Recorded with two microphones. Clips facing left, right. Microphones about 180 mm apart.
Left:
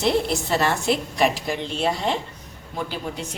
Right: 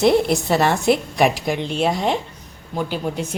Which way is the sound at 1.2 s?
60° right (ahead or behind).